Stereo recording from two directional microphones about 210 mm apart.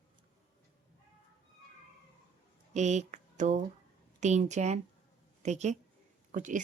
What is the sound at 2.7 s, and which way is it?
A woman's voice, 35° right (ahead or behind).